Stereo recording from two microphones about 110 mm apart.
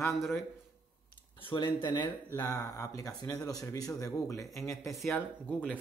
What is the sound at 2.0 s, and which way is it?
Speech, 30° left (ahead or behind).